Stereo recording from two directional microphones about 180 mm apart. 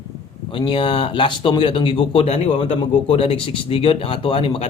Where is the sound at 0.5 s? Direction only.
30° left (ahead or behind).